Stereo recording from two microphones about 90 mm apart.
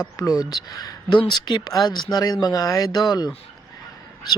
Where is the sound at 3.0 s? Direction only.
50° left (ahead or behind).